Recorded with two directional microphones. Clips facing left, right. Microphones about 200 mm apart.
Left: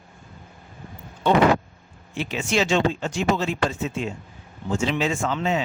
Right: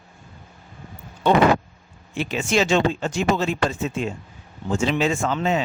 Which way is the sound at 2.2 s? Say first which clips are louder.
Right 2 dB; 45° right (ahead or behind).